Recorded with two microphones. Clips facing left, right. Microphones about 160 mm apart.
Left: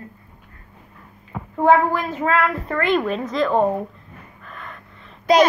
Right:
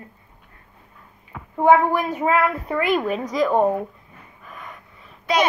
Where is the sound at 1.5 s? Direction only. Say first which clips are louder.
Even; 15° right (ahead or behind).